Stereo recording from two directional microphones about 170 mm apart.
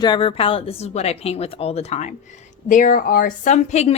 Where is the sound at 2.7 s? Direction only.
50° left (ahead or behind).